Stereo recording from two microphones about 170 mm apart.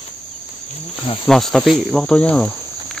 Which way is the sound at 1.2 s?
Centre (ahead or behind).